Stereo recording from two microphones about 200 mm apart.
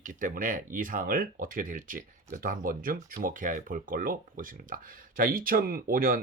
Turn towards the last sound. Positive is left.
turn(degrees=-45)  # may be behind; listen again after turning